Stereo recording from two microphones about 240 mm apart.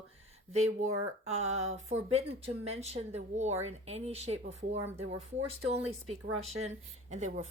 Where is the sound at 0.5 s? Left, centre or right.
Right.